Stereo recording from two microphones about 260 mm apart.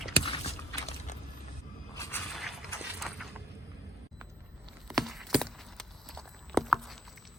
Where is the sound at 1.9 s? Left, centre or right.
Centre.